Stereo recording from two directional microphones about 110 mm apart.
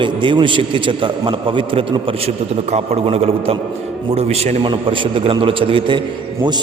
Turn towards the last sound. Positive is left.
turn(degrees=-50)  # may be behind; listen again after turning